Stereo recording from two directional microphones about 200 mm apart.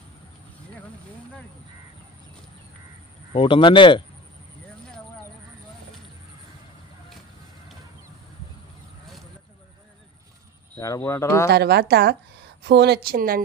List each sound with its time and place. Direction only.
3.3 s speech: 25° left (ahead or behind)
9.0 s vehicle: centre (ahead or behind)
10.8 s speech: 15° left (ahead or behind)
11.5 s a woman's voice: 55° right (ahead or behind)